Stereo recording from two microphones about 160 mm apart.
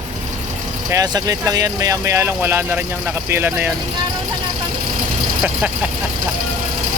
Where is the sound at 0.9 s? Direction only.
20° right (ahead or behind).